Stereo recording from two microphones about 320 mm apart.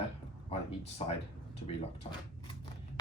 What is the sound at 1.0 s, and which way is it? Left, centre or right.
Speech, centre.